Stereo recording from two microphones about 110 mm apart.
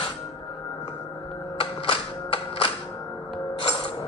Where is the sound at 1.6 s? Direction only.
55° left (ahead or behind).